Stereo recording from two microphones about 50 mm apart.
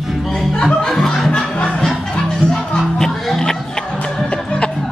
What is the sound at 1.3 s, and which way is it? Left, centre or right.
Music, centre.